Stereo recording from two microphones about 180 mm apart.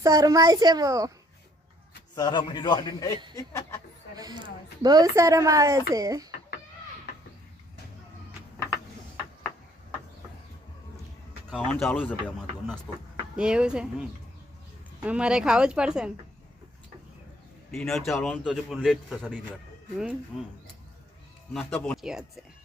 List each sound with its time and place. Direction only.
0.0 s speech: 20° right (ahead or behind)
2.1 s a man's voice: 25° left (ahead or behind)
4.1 s speech: 20° right (ahead or behind)
11.5 s a man's voice: centre (ahead or behind)
17.7 s a man's voice: centre (ahead or behind)
21.5 s speech: 5° left (ahead or behind)